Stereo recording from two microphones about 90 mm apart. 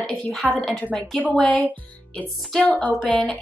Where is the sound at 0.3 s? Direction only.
10° left (ahead or behind).